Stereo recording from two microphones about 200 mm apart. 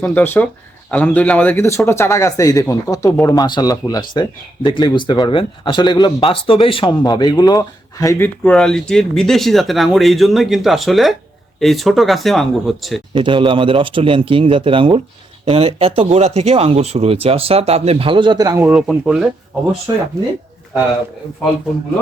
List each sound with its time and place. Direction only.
0.0 s speech: 10° left (ahead or behind)
13.1 s speech: 25° right (ahead or behind); by 19.2 s 5° right (ahead or behind)